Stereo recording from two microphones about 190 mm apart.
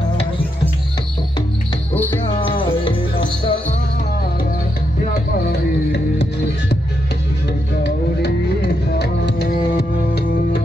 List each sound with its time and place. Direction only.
2.4 s music: 25° left (ahead or behind)
5.5 s music: 60° left (ahead or behind)
7.8 s music: 60° left (ahead or behind)